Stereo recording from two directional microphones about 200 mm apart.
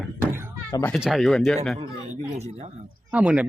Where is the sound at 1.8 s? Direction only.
35° right (ahead or behind).